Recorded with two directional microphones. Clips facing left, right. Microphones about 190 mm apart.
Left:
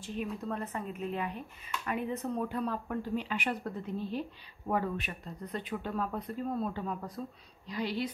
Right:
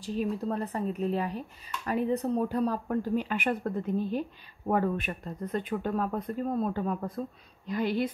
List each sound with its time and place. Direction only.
0.0 s a woman's voice: 35° right (ahead or behind); by 8.1 s 50° right (ahead or behind)